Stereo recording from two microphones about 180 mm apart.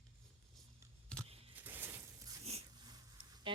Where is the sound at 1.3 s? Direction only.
35° right (ahead or behind).